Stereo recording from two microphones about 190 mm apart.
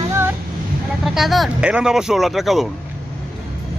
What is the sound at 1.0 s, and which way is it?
Speech, centre (ahead or behind).